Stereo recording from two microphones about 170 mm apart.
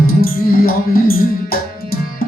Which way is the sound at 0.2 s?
60° left (ahead or behind).